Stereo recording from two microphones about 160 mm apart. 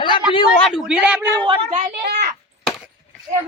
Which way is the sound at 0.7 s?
5° right (ahead or behind).